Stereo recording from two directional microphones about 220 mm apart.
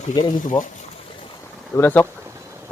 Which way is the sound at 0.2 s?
20° left (ahead or behind).